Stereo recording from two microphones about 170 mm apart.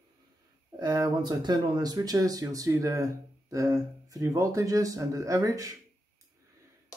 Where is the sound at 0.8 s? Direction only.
25° right (ahead or behind).